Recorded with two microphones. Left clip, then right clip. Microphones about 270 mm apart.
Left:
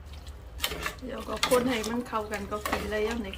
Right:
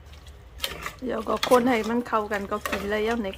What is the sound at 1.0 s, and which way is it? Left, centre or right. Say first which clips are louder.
Speech: right 7 dB; centre.